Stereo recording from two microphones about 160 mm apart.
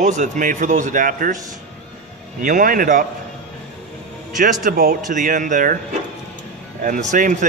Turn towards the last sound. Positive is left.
turn(degrees=-50)  # may be behind; listen again after turning